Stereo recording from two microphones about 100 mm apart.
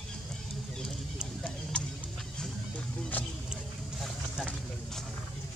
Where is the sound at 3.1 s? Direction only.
15° left (ahead or behind).